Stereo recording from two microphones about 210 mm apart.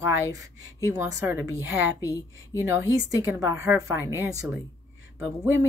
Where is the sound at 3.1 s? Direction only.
15° right (ahead or behind).